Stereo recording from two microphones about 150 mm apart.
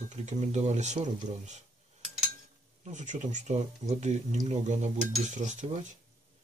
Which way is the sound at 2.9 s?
50° right (ahead or behind).